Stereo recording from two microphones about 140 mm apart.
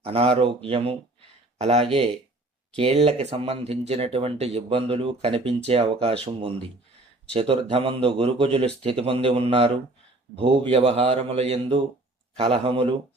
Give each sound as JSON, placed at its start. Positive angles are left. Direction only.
{"t": 0.0, "sound": "speech", "side_deg": -45}